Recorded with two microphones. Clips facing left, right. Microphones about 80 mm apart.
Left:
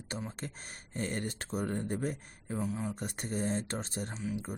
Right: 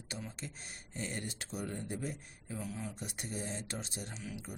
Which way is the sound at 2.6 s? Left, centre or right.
Left.